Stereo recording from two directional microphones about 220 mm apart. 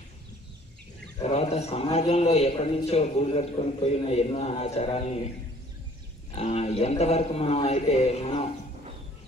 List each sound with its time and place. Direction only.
1.2 s a man's voice: 30° left (ahead or behind)
6.3 s a man's voice: 30° left (ahead or behind)